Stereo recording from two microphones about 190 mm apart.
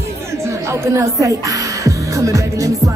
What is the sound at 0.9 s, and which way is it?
Speech, 15° right (ahead or behind).